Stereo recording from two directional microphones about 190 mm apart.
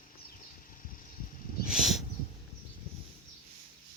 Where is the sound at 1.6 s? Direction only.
Centre (ahead or behind).